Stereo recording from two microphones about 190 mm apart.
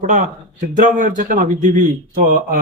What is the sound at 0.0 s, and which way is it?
Speech, 45° right (ahead or behind).